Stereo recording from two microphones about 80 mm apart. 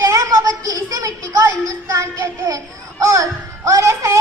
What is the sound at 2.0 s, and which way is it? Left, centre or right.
A child's voice, right.